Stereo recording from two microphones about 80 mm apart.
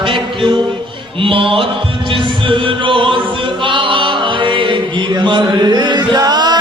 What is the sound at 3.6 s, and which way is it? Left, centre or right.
Chant, right.